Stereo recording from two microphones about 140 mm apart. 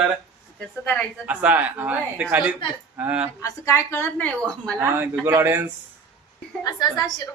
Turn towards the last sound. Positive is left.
turn(degrees=30)  # may be behind; listen again after turning